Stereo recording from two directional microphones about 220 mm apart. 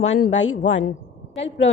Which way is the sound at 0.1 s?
65° left (ahead or behind).